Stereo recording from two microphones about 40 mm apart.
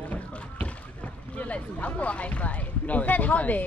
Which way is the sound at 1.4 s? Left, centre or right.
Left.